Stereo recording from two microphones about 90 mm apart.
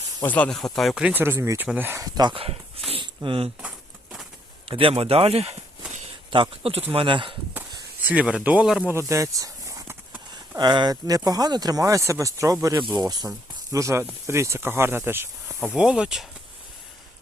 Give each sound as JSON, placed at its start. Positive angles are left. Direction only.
{"t": 0.3, "sound": "speech", "side_deg": 15}
{"t": 0.5, "sound": "speech", "side_deg": 5}
{"t": 1.1, "sound": "speech", "side_deg": -25}
{"t": 2.0, "sound": "speech", "side_deg": -45}
{"t": 2.3, "sound": "speech", "side_deg": -90}
{"t": 4.7, "sound": "speech", "side_deg": -85}
{"t": 8.0, "sound": "speech", "side_deg": -15}
{"t": 8.9, "sound": "a sound", "side_deg": -35}
{"t": 10.6, "sound": "speech", "side_deg": -50}
{"t": 12.8, "sound": "speech", "side_deg": -50}
{"t": 15.6, "sound": "speech", "side_deg": -10}